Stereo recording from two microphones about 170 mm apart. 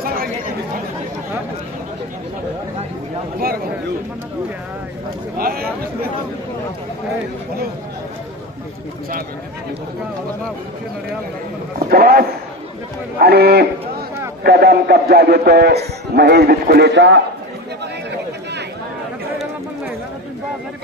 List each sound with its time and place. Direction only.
3.3 s speech: 60° right (ahead or behind)
5.4 s speech: 60° right (ahead or behind)
11.9 s a man's voice: 65° right (ahead or behind); by 17.2 s 90° right